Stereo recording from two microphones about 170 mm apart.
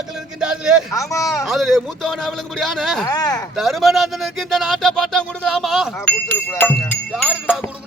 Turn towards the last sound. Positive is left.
turn(degrees=-5)  # may be behind; listen again after turning